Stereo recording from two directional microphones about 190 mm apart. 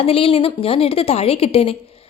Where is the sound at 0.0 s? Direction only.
30° left (ahead or behind).